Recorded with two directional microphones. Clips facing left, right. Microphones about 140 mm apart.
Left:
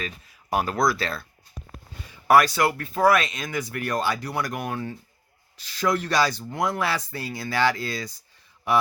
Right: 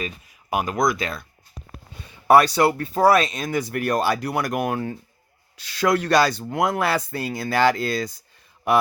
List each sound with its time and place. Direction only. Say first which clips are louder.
0.5 s speech: right 1 dB; 15° right (ahead or behind)
2.2 s speech: right 3 dB; 25° right (ahead or behind); by 4.9 s 50° right (ahead or behind)
5.6 s speech: right 4 dB; 75° right (ahead or behind); by 8.1 s 55° right (ahead or behind)